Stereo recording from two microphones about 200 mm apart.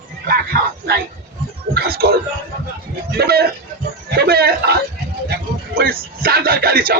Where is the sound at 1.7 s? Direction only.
50° right (ahead or behind).